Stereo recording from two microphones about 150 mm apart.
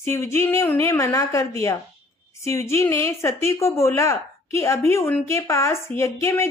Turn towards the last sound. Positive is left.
turn(degrees=20)  # may be behind; listen again after turning